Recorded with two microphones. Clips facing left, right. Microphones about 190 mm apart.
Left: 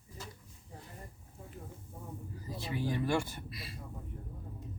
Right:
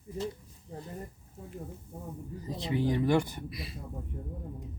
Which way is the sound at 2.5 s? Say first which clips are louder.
Right 6 dB; 20° right (ahead or behind).